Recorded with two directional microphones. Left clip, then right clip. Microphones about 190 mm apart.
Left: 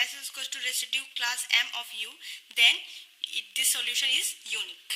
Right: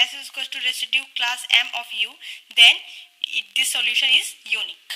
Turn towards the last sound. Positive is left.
turn(degrees=0)  # may be behind; listen again after turning